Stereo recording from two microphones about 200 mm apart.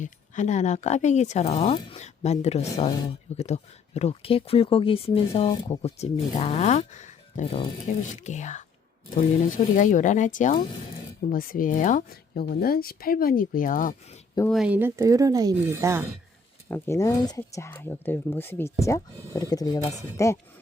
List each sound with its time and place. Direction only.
0.0 s speech: 35° left (ahead or behind)
14.5 s speech: 5° right (ahead or behind)
16.6 s speech: 10° left (ahead or behind)